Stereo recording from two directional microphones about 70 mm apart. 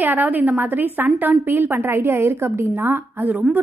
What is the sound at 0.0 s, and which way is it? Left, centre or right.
A woman's voice, right.